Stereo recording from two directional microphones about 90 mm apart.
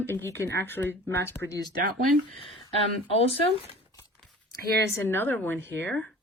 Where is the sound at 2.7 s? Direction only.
90° left.